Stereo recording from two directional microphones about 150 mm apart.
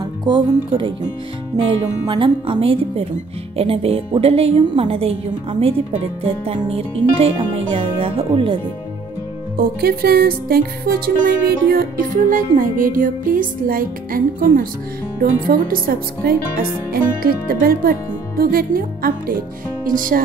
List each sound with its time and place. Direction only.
0.0 s speech: 30° right (ahead or behind)
9.6 s music: 90° right; by 20.2 s 65° right (ahead or behind)